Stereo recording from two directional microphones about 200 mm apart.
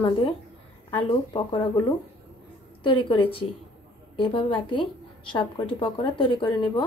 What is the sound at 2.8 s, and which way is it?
A woman's voice, 25° left (ahead or behind).